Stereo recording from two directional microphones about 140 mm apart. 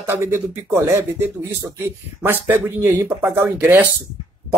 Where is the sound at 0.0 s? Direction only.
20° right (ahead or behind).